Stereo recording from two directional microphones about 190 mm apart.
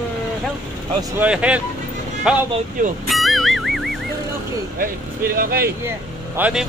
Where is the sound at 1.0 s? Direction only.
10° right (ahead or behind).